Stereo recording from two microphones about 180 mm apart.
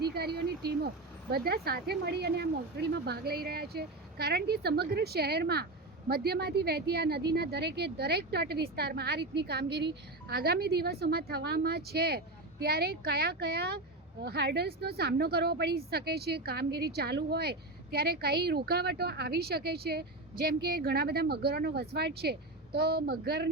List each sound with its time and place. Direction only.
0.0 s speech: 65° right (ahead or behind)